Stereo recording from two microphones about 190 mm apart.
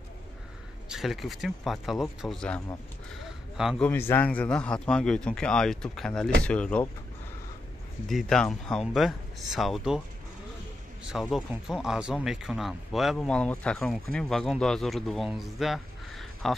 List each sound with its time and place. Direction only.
0.8 s speech: centre (ahead or behind)
8.1 s speech: centre (ahead or behind)
11.1 s speech: centre (ahead or behind)